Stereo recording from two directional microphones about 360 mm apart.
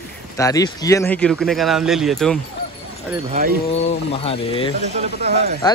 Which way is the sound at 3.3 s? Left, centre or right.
Right.